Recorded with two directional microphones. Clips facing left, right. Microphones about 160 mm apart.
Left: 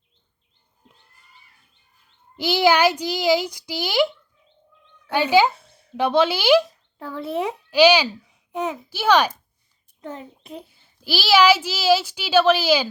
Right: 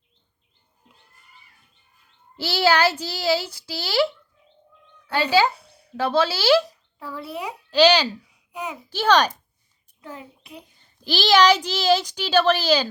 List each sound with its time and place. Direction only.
2.4 s a woman's voice: 15° left (ahead or behind)
7.7 s a woman's voice: 10° left (ahead or behind)
10.7 s a woman's voice: 10° left (ahead or behind)